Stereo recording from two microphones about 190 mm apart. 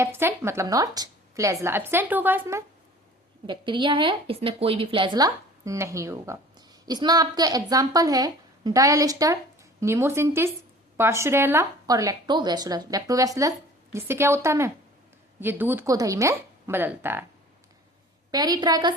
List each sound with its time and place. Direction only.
0.0 s a woman's voice: 10° right (ahead or behind)
3.4 s a woman's voice: 25° right (ahead or behind)
18.3 s a woman's voice: 20° right (ahead or behind)